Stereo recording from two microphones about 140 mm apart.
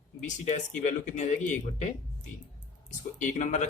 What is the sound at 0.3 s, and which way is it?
Speech, 60° left (ahead or behind).